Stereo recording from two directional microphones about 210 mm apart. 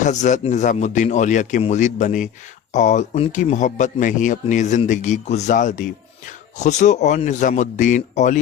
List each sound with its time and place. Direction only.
0.0 s speech: 35° left (ahead or behind)